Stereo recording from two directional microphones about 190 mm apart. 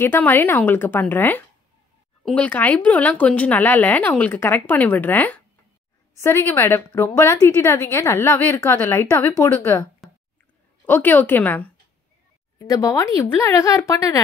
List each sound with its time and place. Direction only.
0.0 s speech: 10° left (ahead or behind)
10.9 s speech: 10° left (ahead or behind)